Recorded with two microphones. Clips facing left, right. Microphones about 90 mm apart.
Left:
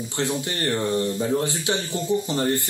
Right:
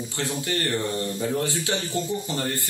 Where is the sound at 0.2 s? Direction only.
25° left (ahead or behind).